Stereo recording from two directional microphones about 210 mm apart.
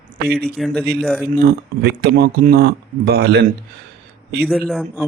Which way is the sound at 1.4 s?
50° right (ahead or behind).